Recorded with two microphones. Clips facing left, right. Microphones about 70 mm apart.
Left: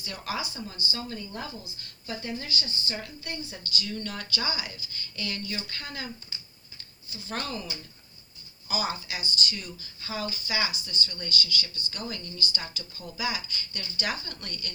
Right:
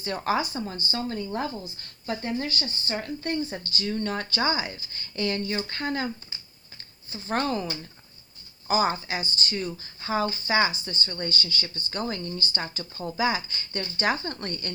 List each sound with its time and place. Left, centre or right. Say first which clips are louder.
0.0 s speech: right 8 dB; right
7.1 s speech: right 8 dB; right